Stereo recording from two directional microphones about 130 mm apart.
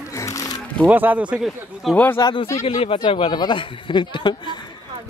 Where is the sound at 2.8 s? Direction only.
45° left (ahead or behind).